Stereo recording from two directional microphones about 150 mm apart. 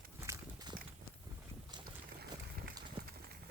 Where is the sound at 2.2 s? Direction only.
90° right.